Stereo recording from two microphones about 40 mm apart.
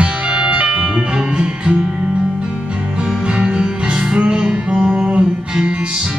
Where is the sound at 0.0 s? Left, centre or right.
Right.